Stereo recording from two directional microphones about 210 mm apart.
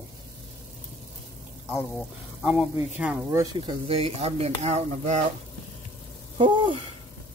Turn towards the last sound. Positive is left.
turn(degrees=-25)  # may be behind; listen again after turning